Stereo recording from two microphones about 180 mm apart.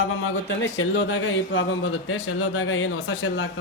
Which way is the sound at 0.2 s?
90° left.